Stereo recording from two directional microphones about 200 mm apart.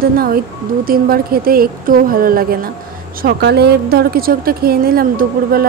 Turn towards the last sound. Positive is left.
turn(degrees=-45)  # may be behind; listen again after turning